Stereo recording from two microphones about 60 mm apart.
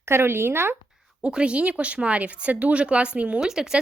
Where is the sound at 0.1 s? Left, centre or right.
Right.